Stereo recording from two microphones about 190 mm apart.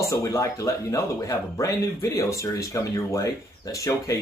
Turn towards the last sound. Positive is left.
turn(degrees=15)  # may be behind; listen again after turning